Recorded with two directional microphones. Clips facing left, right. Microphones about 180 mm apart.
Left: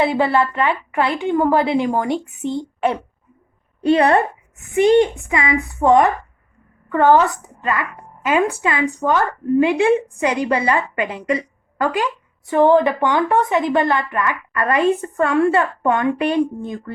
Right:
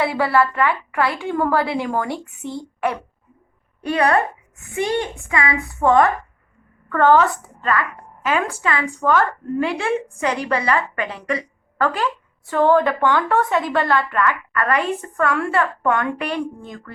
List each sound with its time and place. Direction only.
0.0 s a woman's voice: 20° left (ahead or behind)